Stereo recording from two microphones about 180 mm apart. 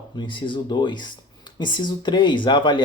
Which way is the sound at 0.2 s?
25° left (ahead or behind).